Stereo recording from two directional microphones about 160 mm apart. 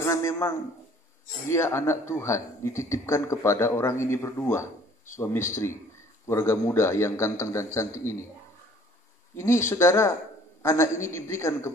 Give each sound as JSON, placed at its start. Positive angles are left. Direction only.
{"t": 0.0, "sound": "a man's voice", "side_deg": 20}
{"t": 9.4, "sound": "speech", "side_deg": 15}